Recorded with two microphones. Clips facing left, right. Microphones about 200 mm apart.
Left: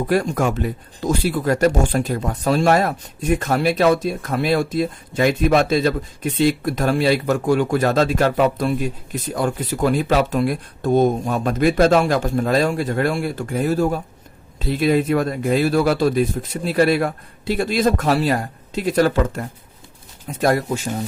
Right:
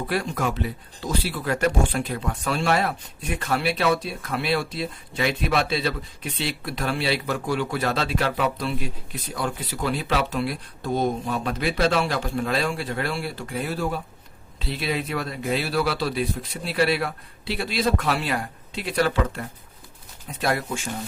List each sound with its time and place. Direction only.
0.0 s speech: 45° left (ahead or behind)